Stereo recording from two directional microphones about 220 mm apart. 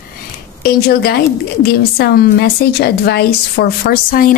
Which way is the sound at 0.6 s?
45° left (ahead or behind).